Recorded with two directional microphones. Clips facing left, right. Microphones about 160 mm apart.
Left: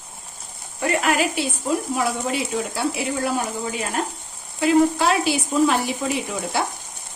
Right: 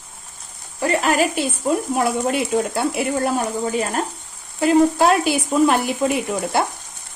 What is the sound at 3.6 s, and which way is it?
Speech, 40° right (ahead or behind).